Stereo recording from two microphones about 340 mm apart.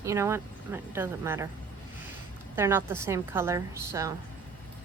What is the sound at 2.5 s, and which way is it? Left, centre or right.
A woman's voice, centre.